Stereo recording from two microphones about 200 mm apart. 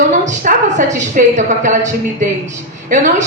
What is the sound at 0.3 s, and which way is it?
A woman's voice, 40° right (ahead or behind).